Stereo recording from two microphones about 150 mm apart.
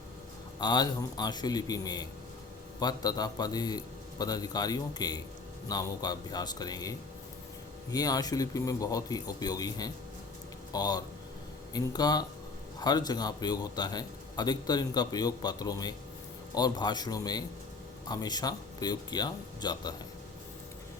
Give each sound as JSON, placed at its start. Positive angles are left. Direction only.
{"t": 0.6, "sound": "a man's voice", "side_deg": 30}